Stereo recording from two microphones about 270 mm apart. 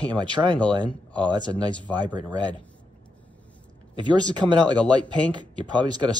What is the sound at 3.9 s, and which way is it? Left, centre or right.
Speech, centre.